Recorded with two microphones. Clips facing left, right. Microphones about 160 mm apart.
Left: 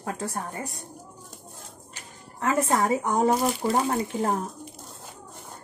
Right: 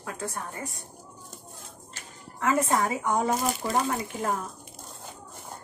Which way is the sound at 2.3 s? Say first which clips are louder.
Left 1 dB; 35° left (ahead or behind).